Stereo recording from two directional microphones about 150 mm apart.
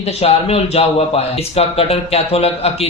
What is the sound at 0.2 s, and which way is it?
A man's voice, 40° left (ahead or behind).